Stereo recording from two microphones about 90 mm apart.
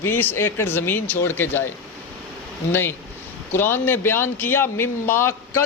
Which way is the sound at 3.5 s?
25° left (ahead or behind).